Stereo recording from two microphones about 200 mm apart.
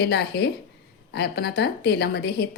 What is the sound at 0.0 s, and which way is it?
A woman's voice, 55° left (ahead or behind).